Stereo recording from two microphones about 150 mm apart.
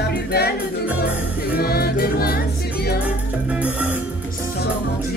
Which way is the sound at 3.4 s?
10° right (ahead or behind).